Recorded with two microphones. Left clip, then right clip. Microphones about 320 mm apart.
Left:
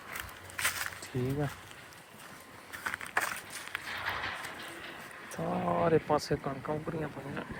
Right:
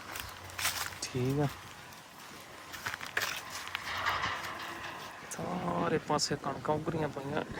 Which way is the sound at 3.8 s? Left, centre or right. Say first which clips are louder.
Right 4 dB; right.